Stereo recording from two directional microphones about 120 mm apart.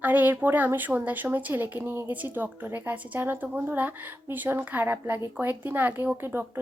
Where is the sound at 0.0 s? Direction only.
15° right (ahead or behind).